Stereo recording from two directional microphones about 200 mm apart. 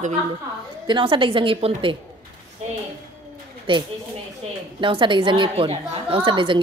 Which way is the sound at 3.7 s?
25° right (ahead or behind).